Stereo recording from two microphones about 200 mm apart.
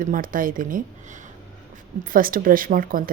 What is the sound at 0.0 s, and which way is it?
Speech, 45° right (ahead or behind).